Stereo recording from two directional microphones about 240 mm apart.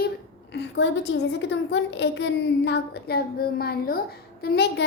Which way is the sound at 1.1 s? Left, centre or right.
Left.